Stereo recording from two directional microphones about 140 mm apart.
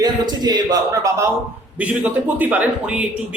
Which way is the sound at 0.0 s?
30° right (ahead or behind).